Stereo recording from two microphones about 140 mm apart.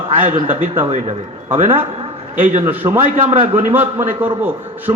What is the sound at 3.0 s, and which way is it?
Speech, 40° right (ahead or behind).